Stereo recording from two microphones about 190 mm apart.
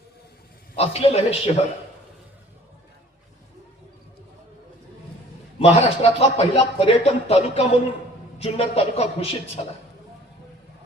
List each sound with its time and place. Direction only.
0.8 s a man's voice: 30° left (ahead or behind)
5.5 s a man's voice: 30° left (ahead or behind)